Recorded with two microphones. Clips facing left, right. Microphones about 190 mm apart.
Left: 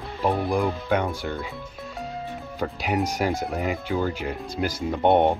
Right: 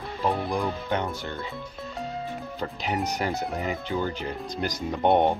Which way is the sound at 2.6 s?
5° left (ahead or behind).